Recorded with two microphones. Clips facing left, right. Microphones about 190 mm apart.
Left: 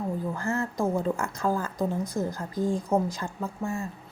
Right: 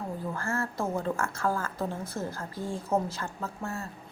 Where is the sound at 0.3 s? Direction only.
15° left (ahead or behind).